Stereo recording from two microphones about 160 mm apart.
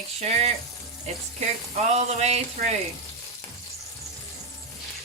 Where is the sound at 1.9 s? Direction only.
45° right (ahead or behind).